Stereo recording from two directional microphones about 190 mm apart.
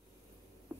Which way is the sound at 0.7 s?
10° right (ahead or behind).